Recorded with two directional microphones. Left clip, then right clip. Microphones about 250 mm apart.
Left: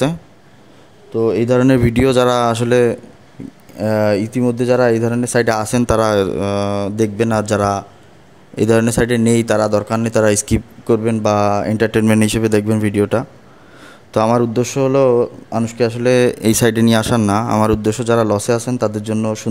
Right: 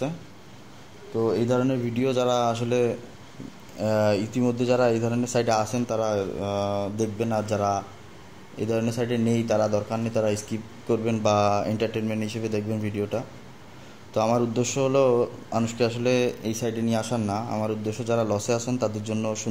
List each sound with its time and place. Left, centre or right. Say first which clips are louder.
1.4 s a man's voice: left 11 dB; left